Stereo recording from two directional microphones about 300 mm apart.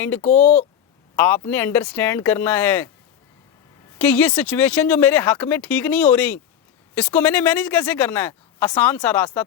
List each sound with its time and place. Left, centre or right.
0.0 s speech: centre
0.3 s speech: left
1.1 s speech: centre
3.9 s speech: centre